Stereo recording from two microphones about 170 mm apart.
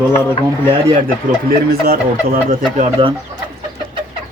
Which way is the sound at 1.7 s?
60° right (ahead or behind).